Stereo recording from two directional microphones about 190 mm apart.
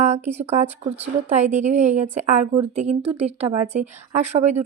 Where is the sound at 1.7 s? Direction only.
35° right (ahead or behind).